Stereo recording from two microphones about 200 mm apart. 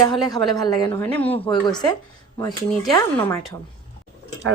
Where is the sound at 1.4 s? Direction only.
20° left (ahead or behind).